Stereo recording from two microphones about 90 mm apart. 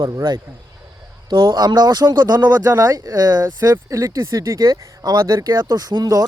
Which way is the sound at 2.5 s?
35° right (ahead or behind).